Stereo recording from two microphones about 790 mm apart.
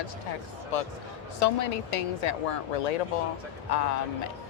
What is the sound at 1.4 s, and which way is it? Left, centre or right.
Speech, left.